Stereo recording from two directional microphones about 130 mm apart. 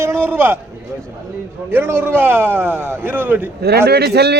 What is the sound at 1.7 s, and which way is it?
A man's voice, 15° right (ahead or behind).